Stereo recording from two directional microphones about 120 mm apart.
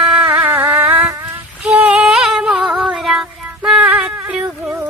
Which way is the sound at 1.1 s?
25° right (ahead or behind).